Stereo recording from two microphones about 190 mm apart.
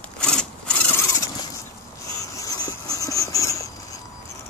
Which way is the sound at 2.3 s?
20° left (ahead or behind).